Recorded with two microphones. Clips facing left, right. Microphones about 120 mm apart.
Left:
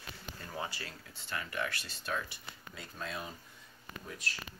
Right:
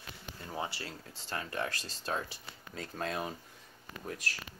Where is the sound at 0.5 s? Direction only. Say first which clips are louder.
Right 3 dB; 25° right (ahead or behind).